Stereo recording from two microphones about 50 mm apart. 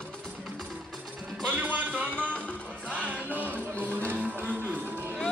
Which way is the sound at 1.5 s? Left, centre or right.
Right.